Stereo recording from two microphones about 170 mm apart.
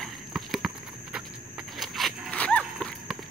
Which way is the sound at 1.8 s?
Centre (ahead or behind).